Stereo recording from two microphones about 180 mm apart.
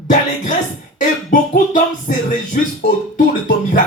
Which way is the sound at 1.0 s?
45° left (ahead or behind).